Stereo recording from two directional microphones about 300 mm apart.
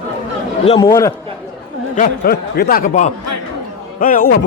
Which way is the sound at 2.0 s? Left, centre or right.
Left.